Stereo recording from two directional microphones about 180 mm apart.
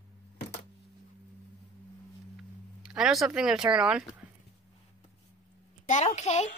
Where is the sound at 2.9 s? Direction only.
Centre (ahead or behind).